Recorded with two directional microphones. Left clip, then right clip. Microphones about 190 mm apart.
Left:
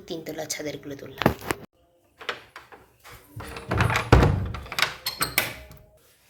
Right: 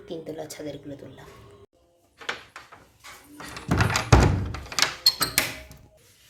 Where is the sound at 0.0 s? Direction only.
5° left (ahead or behind).